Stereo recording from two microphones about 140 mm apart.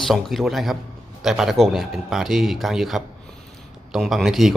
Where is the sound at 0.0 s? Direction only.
Centre (ahead or behind).